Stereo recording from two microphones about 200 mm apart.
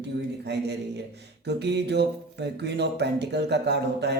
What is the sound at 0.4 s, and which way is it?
Speech, 55° right (ahead or behind).